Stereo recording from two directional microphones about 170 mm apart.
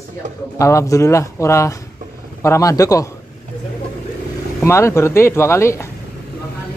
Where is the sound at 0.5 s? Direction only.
20° left (ahead or behind).